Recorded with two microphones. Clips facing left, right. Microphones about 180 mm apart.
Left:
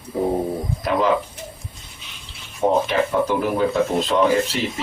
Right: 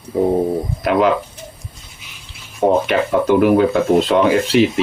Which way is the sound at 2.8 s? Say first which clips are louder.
Right 4 dB; 70° right (ahead or behind).